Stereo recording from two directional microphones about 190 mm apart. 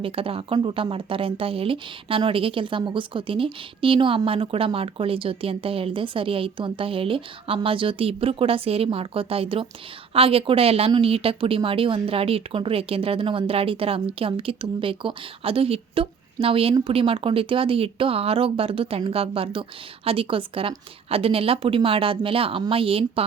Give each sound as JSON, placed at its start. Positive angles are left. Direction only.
{"t": 0.0, "sound": "speech", "side_deg": -30}